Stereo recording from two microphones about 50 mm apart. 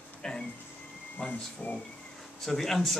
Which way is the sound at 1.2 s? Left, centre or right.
Left.